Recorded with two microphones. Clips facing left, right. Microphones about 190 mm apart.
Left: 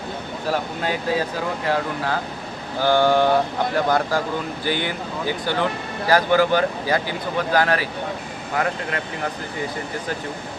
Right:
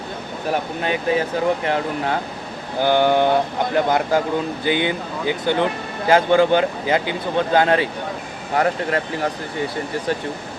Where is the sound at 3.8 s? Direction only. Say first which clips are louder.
Right 2 dB; 20° right (ahead or behind).